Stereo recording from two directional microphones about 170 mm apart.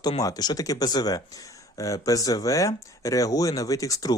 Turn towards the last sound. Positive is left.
turn(degrees=20)  # may be behind; listen again after turning